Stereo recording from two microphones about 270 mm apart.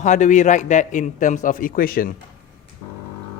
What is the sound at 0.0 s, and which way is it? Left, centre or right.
A man's voice, left.